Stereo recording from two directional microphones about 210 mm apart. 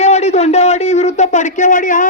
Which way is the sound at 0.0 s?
30° left (ahead or behind).